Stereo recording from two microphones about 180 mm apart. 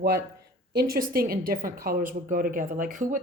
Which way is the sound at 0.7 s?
55° right (ahead or behind).